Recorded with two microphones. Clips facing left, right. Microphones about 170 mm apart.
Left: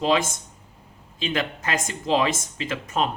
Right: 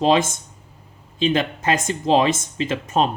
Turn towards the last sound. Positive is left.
turn(degrees=-25)  # may be behind; listen again after turning